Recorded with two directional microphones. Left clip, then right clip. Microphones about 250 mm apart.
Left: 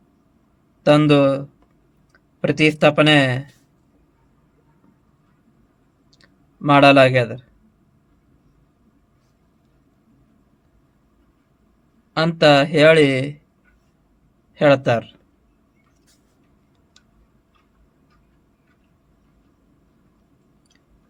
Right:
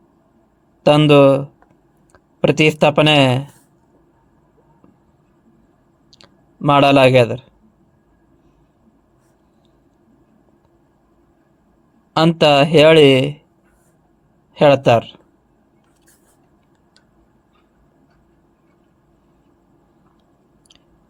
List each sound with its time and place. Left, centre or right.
0.8 s speech: right
6.1 s clicking: right
12.1 s speech: right
14.5 s speech: right